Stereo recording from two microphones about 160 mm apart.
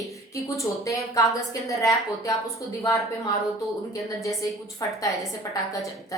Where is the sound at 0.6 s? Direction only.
20° left (ahead or behind).